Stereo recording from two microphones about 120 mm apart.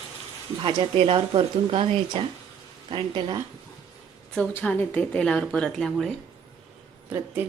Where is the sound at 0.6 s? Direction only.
40° right (ahead or behind).